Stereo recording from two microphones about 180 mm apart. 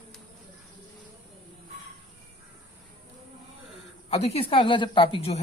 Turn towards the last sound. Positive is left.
turn(degrees=30)  # may be behind; listen again after turning